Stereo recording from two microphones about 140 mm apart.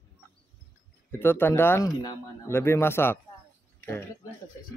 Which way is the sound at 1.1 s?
15° left (ahead or behind).